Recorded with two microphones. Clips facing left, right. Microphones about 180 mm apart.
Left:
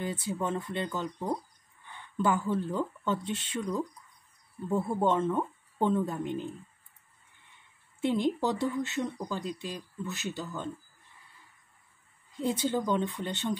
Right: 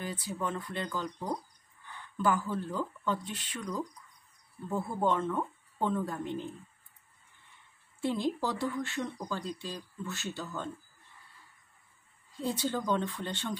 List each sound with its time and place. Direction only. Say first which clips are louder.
0.0 s speech: left 3 dB; 25° left (ahead or behind)
8.0 s speech: left 3 dB; 20° left (ahead or behind)
12.4 s speech: left 3 dB; 20° left (ahead or behind)